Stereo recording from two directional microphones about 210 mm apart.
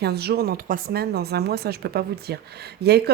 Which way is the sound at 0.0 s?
50° right (ahead or behind).